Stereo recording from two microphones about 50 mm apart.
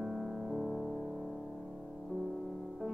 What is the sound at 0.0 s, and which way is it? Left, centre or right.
Music, centre.